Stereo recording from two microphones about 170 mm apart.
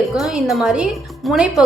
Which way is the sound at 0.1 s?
5° right (ahead or behind).